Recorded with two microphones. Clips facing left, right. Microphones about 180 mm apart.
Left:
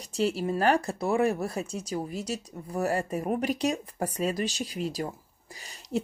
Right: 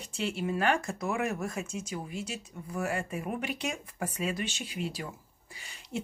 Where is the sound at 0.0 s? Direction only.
40° left (ahead or behind).